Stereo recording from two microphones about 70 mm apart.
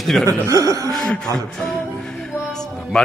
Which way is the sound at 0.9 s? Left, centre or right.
Centre.